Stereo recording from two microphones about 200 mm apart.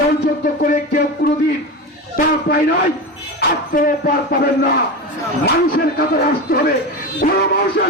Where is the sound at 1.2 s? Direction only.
45° left (ahead or behind).